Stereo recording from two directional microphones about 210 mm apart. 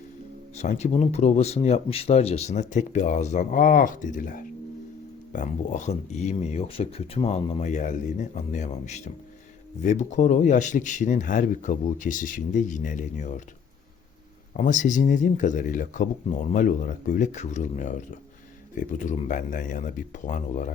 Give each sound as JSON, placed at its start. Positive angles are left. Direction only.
{"t": 0.5, "sound": "speech", "side_deg": 30}
{"t": 14.5, "sound": "speech", "side_deg": 40}